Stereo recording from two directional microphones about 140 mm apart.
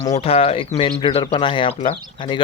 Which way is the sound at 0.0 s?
50° left (ahead or behind).